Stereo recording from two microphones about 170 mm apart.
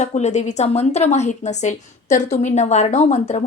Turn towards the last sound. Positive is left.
turn(degrees=40)  # may be behind; listen again after turning